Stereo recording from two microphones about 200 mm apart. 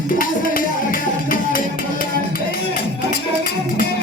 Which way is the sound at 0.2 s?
45° left (ahead or behind).